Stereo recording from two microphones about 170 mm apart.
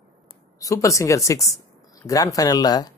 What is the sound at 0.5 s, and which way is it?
Speech, 20° left (ahead or behind).